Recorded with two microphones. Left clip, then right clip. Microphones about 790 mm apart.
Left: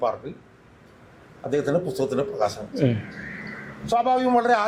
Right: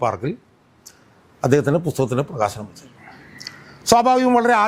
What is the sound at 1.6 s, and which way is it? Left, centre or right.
Speech, right.